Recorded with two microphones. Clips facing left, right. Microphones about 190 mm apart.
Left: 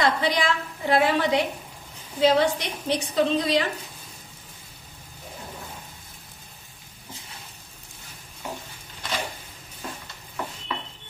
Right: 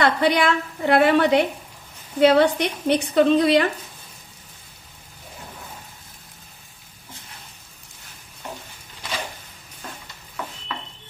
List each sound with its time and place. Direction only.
0.0 s a woman's voice: 60° right (ahead or behind)